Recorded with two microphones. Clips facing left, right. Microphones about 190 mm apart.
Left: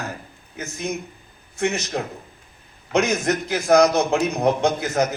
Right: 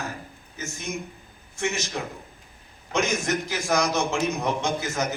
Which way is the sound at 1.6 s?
60° left (ahead or behind).